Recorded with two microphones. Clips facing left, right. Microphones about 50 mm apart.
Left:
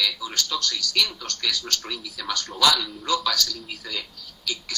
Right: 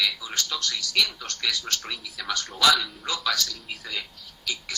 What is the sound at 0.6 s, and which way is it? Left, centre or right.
Speech, right.